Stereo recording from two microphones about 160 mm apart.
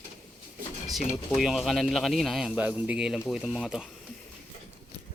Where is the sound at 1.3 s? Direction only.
5° right (ahead or behind).